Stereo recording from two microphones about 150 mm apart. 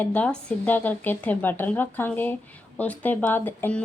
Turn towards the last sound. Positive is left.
turn(degrees=10)  # may be behind; listen again after turning